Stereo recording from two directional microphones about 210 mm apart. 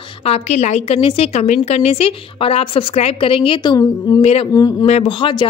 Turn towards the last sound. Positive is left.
turn(degrees=20)  # may be behind; listen again after turning